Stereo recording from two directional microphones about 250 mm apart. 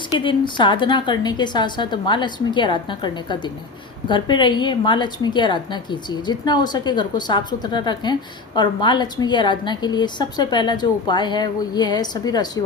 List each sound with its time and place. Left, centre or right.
0.2 s a woman's voice: centre